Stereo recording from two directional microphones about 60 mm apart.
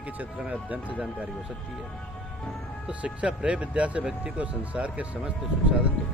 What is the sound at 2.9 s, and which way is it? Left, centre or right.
Speech, centre.